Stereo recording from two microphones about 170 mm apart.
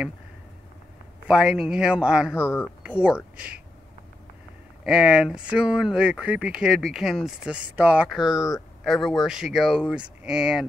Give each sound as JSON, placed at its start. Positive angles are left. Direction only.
{"t": 1.3, "sound": "speech", "side_deg": -5}
{"t": 2.4, "sound": "speech", "side_deg": 15}
{"t": 2.8, "sound": "speech", "side_deg": -5}
{"t": 4.8, "sound": "speech", "side_deg": -5}